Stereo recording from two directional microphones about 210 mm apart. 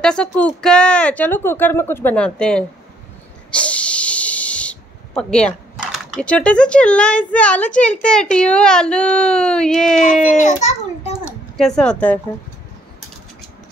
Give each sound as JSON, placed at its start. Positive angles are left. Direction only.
{"t": 0.0, "sound": "a woman's voice", "side_deg": 5}
{"t": 10.2, "sound": "a child's voice", "side_deg": 35}
{"t": 11.5, "sound": "a woman's voice", "side_deg": 0}